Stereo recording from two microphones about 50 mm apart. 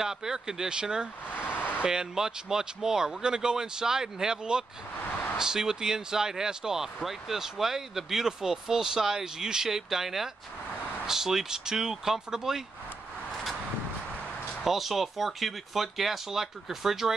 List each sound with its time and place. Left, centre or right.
0.0 s speech: centre
1.3 s vehicle: left
1.8 s speech: centre
14.6 s speech: centre